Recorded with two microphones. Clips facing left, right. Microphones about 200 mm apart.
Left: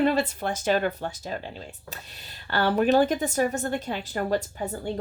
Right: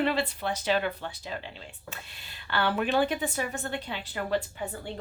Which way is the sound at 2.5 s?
40° left (ahead or behind).